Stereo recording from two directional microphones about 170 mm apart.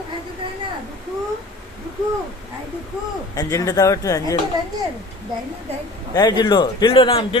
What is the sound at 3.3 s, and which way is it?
A man's voice, 20° left (ahead or behind).